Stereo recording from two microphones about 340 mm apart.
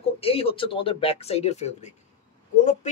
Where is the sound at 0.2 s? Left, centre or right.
Centre.